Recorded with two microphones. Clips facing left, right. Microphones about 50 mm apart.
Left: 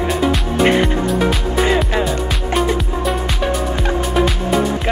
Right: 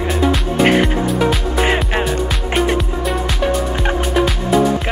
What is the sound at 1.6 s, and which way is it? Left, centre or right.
Music, right.